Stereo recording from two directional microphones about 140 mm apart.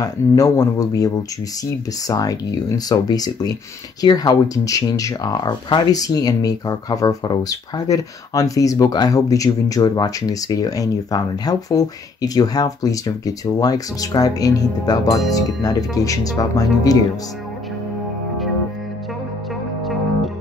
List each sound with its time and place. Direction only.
0.4 s speech: 25° left (ahead or behind)